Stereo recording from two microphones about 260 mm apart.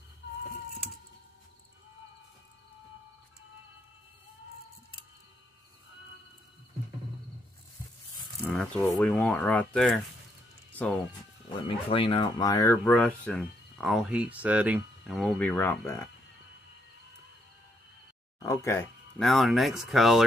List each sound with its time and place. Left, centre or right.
8.5 s speech: centre
11.6 s speech: left
18.4 s speech: centre